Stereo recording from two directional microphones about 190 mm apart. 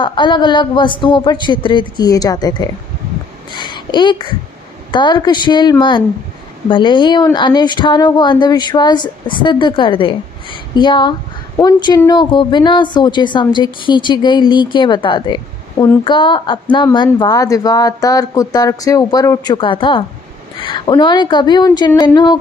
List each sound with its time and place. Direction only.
0.0 s a woman's voice: 25° left (ahead or behind)